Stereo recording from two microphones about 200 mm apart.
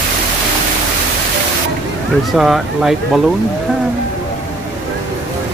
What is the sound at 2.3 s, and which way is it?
Speech, centre (ahead or behind).